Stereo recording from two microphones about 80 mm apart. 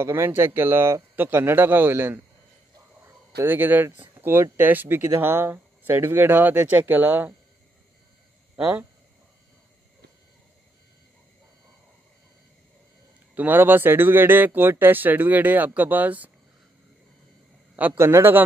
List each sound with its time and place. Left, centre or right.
0.0 s speech: right
3.3 s speech: right
8.5 s speech: centre
13.3 s speech: right
17.9 s a man's voice: right